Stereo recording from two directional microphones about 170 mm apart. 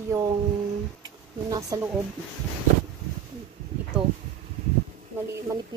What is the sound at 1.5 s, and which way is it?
Speech, 20° right (ahead or behind).